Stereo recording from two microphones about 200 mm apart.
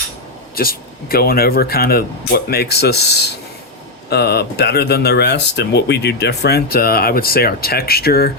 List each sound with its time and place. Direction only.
0.5 s speech: 50° left (ahead or behind)